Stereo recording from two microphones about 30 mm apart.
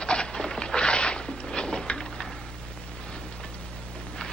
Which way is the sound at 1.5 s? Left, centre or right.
Left.